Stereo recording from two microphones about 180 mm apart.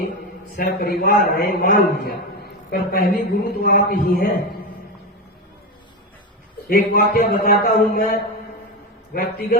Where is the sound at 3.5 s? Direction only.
55° left (ahead or behind).